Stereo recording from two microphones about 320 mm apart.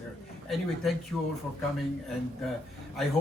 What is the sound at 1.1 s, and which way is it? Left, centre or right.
Speech, centre.